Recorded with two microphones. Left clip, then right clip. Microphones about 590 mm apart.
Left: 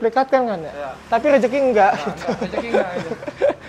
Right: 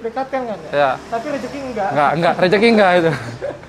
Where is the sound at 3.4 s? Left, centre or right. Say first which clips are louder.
Left 10 dB; left.